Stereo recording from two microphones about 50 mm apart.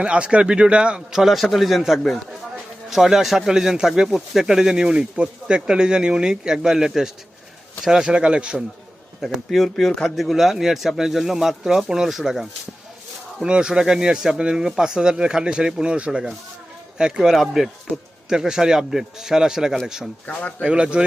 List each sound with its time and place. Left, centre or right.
0.0 s speech: right
1.2 s a man's voice: centre; by 8.5 s right
9.5 s a man's voice: centre
17.3 s a man's voice: centre
18.3 s speech: centre
20.2 s speech: left
20.7 s speech: right